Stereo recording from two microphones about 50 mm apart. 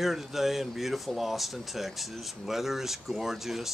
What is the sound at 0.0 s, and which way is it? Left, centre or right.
Speech, centre.